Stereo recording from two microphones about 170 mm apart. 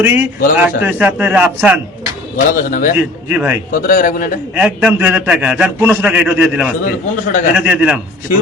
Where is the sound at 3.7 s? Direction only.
60° left (ahead or behind).